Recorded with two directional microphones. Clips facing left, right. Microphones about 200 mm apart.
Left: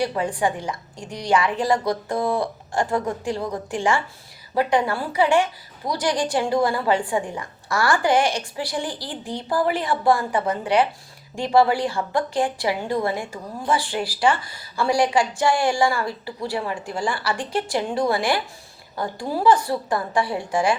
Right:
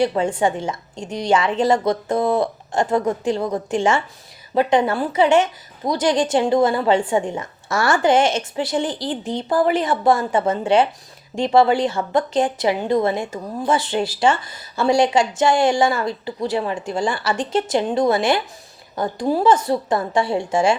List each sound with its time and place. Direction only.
0.0 s speech: 25° right (ahead or behind)